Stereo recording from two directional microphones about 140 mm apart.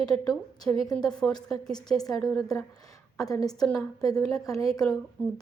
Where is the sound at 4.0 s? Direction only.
25° left (ahead or behind).